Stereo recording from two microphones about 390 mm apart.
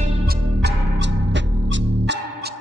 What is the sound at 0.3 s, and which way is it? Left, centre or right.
Music, right.